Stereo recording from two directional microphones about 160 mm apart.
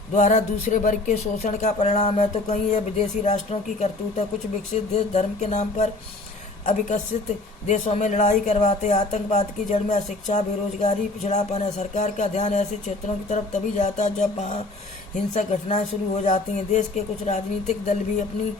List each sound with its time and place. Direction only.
0.1 s speech: 50° left (ahead or behind)